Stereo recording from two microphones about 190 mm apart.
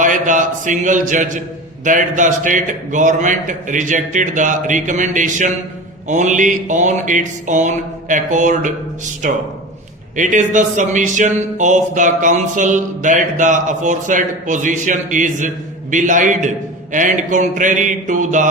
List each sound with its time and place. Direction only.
0.0 s speech: 40° right (ahead or behind)